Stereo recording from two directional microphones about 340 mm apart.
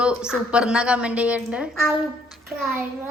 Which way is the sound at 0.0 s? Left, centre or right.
Centre.